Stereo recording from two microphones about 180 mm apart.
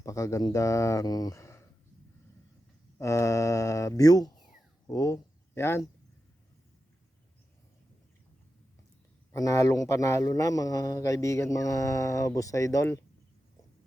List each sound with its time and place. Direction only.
0.0 s speech: 20° left (ahead or behind)
3.0 s speech: 15° left (ahead or behind)
9.3 s speech: 20° left (ahead or behind)